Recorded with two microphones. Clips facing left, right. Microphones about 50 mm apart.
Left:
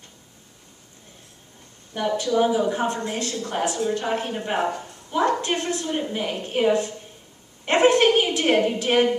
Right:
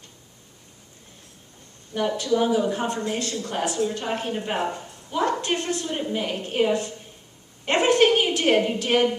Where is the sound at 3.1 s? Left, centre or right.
Centre.